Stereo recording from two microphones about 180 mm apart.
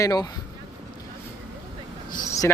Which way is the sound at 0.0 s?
20° left (ahead or behind).